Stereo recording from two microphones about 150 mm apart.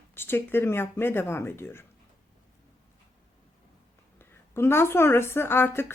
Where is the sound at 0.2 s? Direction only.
15° left (ahead or behind).